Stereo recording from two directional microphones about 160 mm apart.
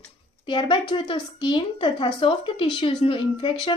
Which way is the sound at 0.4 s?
30° left (ahead or behind).